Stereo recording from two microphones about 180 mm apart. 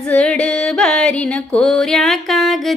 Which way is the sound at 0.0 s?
5° left (ahead or behind).